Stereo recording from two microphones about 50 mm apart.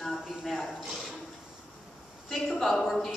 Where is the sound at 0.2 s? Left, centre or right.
Centre.